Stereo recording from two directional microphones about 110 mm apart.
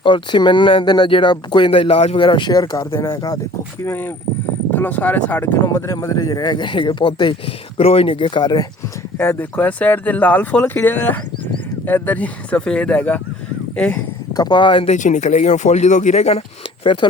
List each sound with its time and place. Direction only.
0.0 s speech: 45° left (ahead or behind); by 3.3 s 30° left (ahead or behind)
3.8 s speech: 20° left (ahead or behind); by 8.6 s 40° left (ahead or behind)
9.1 s speech: 20° left (ahead or behind)
14.3 s speech: 40° left (ahead or behind)
14.8 s speech: 90° left
16.8 s speech: 50° left (ahead or behind)